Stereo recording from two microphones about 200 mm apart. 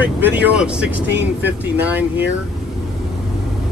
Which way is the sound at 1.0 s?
60° right (ahead or behind).